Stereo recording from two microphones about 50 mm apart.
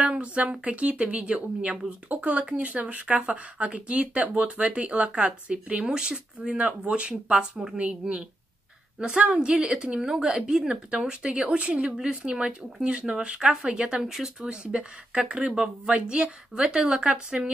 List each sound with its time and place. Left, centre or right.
0.0 s speech: right
14.0 s speech: centre